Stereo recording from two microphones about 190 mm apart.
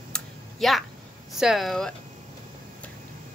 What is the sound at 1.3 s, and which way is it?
Speech, centre (ahead or behind).